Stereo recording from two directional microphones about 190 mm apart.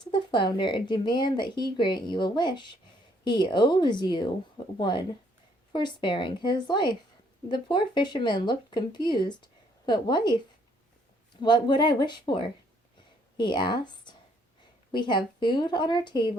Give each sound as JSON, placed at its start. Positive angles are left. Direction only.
{"t": 0.0, "sound": "speech", "side_deg": 25}